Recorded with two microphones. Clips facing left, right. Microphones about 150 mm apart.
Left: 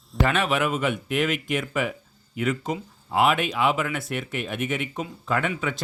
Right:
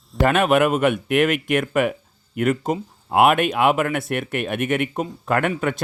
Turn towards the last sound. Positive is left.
turn(degrees=-55)  # may be behind; listen again after turning